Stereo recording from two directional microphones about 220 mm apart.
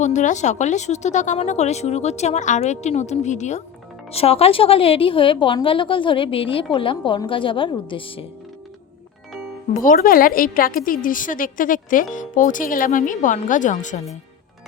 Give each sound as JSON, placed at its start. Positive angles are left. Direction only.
{"t": 0.0, "sound": "a woman's voice", "side_deg": 35}
{"t": 9.7, "sound": "a woman's voice", "side_deg": 40}